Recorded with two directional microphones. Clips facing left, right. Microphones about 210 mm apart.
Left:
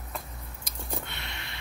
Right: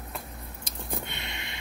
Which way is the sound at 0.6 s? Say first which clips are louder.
Right 1 dB; 20° right (ahead or behind).